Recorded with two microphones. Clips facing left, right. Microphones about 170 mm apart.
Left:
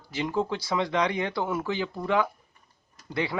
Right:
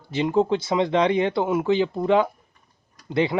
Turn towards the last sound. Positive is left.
turn(degrees=-25)  # may be behind; listen again after turning